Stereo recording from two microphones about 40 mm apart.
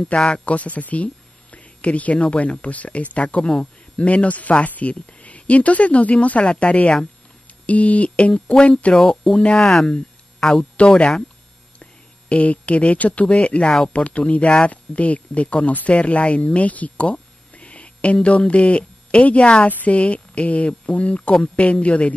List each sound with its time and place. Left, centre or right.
0.1 s speech: left
0.6 s speech: left
4.0 s speech: left
8.9 s speech: centre
9.6 s speech: centre
11.8 s a woman's voice: left
13.3 s speech: left
13.7 s speech: centre
13.9 s speech: left